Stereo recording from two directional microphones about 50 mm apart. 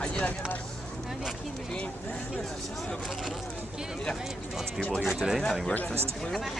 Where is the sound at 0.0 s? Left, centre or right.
Left.